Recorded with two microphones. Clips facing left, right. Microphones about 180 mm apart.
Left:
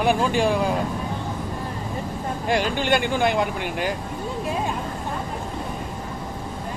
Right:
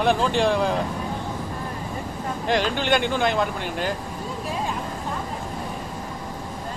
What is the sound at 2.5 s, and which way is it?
Speech, 10° left (ahead or behind).